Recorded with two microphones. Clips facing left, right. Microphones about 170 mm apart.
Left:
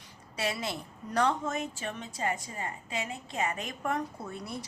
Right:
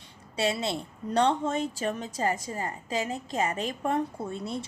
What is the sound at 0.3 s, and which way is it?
A woman's voice, 25° right (ahead or behind).